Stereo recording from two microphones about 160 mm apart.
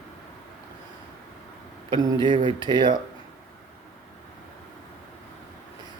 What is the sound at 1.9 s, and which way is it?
Speech, 30° right (ahead or behind).